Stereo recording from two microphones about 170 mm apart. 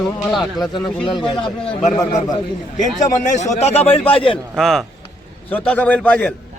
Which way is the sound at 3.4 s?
40° left (ahead or behind).